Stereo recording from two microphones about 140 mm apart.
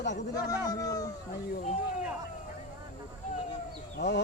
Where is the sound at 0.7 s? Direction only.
25° left (ahead or behind).